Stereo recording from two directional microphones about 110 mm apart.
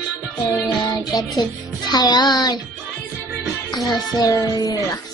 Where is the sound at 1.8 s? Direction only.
40° left (ahead or behind).